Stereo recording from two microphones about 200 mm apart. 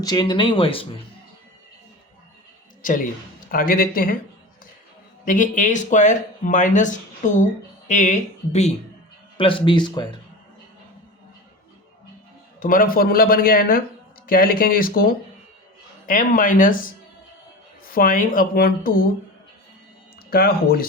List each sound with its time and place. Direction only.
0.0 s speech: 20° left (ahead or behind)
2.8 s speech: 40° left (ahead or behind)
5.2 s speech: 40° left (ahead or behind); by 10.2 s 20° left (ahead or behind)
12.5 s speech: 45° left (ahead or behind)
17.8 s speech: 45° left (ahead or behind)
20.3 s speech: 50° left (ahead or behind)